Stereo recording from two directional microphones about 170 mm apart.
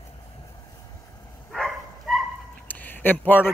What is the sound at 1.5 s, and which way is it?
Bow-wow, centre (ahead or behind).